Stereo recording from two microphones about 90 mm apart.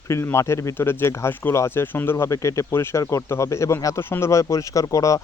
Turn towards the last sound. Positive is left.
turn(degrees=35)  # may be behind; listen again after turning